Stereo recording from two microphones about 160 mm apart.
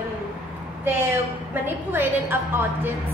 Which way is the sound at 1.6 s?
15° right (ahead or behind).